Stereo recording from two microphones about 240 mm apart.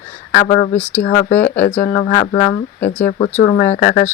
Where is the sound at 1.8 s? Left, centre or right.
Left.